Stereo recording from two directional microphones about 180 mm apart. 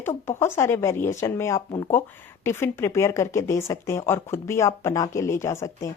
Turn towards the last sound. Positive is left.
turn(degrees=15)  # may be behind; listen again after turning